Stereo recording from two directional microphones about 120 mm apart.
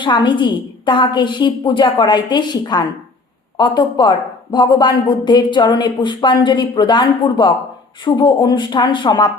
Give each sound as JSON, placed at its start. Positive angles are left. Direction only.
{"t": 0.0, "sound": "a woman's voice", "side_deg": 40}